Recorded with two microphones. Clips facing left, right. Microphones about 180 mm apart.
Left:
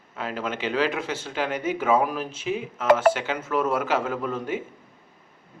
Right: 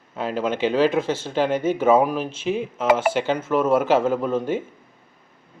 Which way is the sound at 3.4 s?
25° right (ahead or behind).